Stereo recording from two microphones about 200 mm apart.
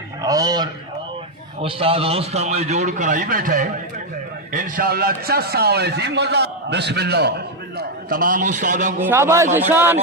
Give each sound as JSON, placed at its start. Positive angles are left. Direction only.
{"t": 0.2, "sound": "a man's voice", "side_deg": -20}
{"t": 9.0, "sound": "a man's voice", "side_deg": -10}